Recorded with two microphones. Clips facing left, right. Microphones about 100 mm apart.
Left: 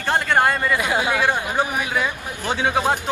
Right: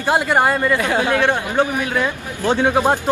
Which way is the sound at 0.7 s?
10° left (ahead or behind).